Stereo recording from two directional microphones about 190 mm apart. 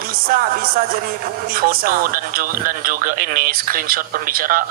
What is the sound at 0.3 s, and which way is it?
Speech, 50° right (ahead or behind).